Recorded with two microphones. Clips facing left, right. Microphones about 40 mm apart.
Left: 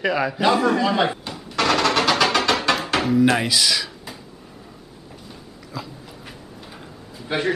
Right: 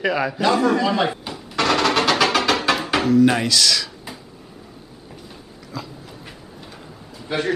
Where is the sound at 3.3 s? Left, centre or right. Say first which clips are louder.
Right 1 dB; centre.